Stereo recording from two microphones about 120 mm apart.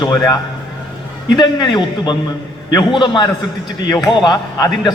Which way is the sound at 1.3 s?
40° left (ahead or behind).